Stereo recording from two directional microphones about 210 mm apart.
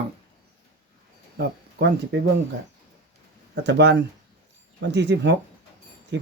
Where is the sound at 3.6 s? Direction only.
55° right (ahead or behind).